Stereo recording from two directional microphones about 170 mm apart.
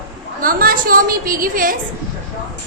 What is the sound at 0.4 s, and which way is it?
A woman's voice, 55° right (ahead or behind).